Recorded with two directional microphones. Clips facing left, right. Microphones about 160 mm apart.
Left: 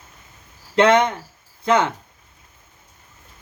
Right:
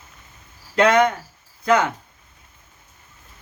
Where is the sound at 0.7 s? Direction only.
25° left (ahead or behind).